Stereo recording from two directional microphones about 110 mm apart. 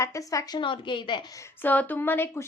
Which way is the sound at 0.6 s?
50° left (ahead or behind).